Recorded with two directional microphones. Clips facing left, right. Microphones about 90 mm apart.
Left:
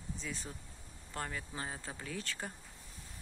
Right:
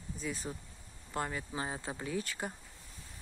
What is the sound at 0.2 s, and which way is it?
Speech, 5° right (ahead or behind).